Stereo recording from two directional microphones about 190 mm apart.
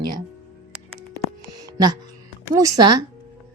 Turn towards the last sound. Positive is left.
turn(degrees=-20)  # may be behind; listen again after turning